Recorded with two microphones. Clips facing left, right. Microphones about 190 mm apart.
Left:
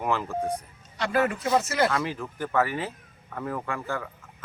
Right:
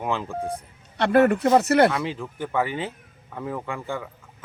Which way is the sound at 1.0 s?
60° right (ahead or behind).